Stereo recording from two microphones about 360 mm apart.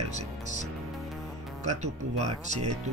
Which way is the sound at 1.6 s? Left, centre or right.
Centre.